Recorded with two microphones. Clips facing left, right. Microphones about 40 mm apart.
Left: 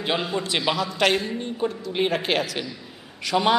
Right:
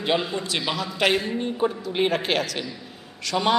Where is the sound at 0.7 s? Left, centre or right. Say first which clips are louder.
Right 2 dB; centre.